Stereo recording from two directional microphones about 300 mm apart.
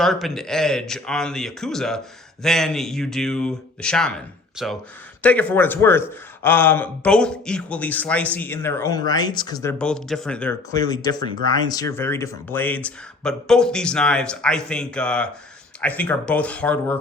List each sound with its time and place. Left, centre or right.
0.0 s a man's voice: centre